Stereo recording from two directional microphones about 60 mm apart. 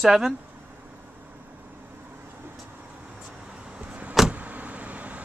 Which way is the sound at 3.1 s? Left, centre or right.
Centre.